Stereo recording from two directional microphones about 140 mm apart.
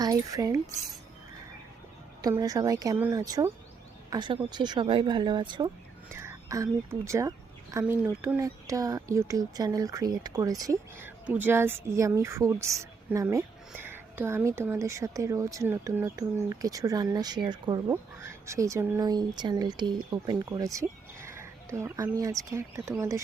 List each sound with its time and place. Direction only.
0.0 s speech: 25° right (ahead or behind)
2.2 s a woman's voice: 25° right (ahead or behind)
4.1 s speech: 35° right (ahead or behind)
6.1 s a woman's voice: 20° right (ahead or behind)
17.9 s a woman's voice: 20° right (ahead or behind)
19.0 s a woman's voice: 30° right (ahead or behind)